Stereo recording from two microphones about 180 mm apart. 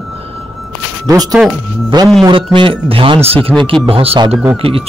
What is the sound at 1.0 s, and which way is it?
A man's voice, 20° right (ahead or behind).